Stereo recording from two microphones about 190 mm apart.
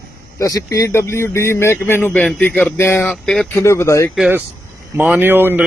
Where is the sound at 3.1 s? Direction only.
Centre (ahead or behind).